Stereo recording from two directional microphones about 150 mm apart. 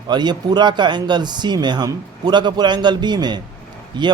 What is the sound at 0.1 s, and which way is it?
Speech, 30° right (ahead or behind).